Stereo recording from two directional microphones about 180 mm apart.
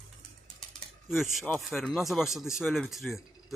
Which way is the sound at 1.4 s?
5° left (ahead or behind).